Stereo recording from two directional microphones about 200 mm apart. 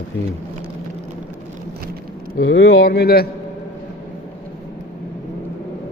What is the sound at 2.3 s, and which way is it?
Speech, 65° left (ahead or behind).